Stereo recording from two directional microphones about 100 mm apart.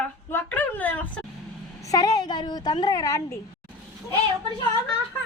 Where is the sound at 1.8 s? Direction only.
35° left (ahead or behind).